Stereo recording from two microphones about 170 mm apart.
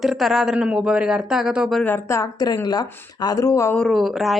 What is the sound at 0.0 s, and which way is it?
Speech, centre (ahead or behind).